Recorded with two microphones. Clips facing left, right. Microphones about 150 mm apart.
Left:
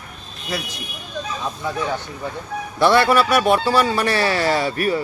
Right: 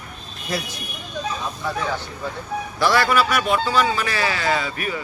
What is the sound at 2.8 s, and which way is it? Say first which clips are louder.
Speech: left 4 dB; 25° left (ahead or behind).